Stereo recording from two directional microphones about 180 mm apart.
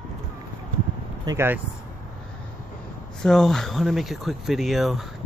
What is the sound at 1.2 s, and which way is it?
Speech, 15° right (ahead or behind).